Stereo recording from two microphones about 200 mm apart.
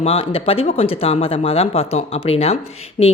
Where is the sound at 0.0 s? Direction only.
30° left (ahead or behind).